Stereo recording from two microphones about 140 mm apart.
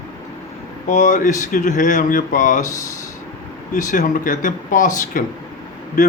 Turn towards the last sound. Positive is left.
turn(degrees=65)  # may be behind; listen again after turning